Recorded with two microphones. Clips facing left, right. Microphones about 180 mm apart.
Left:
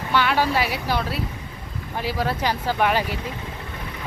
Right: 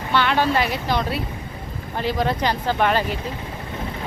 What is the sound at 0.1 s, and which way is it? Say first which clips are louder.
Speech: right 1 dB; 10° left (ahead or behind).